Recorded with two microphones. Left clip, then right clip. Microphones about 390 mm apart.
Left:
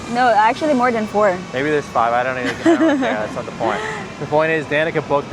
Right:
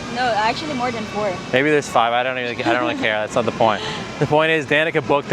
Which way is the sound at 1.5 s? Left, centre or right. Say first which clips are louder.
Right 2 dB; right.